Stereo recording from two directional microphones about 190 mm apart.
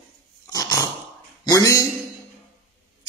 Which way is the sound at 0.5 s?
15° left (ahead or behind).